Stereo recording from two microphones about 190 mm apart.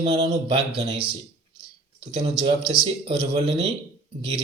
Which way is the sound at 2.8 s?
30° right (ahead or behind).